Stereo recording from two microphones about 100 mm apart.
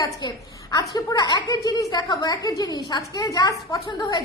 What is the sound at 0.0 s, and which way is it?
A woman's voice, 40° left (ahead or behind).